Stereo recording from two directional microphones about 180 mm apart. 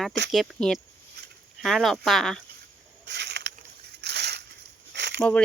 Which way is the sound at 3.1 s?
70° right (ahead or behind).